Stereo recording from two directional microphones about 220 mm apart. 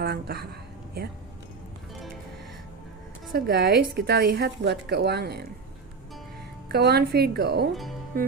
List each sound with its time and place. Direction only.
0.0 s a woman's voice: 45° right (ahead or behind)
3.3 s a woman's voice: 45° right (ahead or behind)
6.7 s a woman's voice: 45° right (ahead or behind)
7.7 s speech: centre (ahead or behind)
8.1 s a woman's voice: 45° right (ahead or behind)